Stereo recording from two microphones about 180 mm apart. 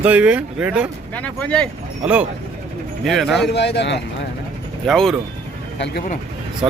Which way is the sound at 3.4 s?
70° left (ahead or behind).